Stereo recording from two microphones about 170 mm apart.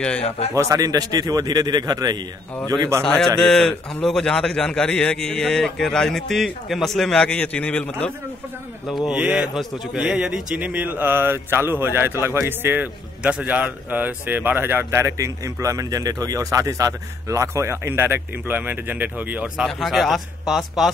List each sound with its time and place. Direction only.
0.6 s a man's voice: 20° right (ahead or behind)
3.0 s a man's voice: 5° left (ahead or behind)
9.0 s a man's voice: 5° right (ahead or behind)